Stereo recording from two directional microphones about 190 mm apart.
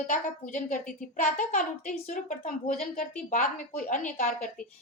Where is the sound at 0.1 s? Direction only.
40° left (ahead or behind).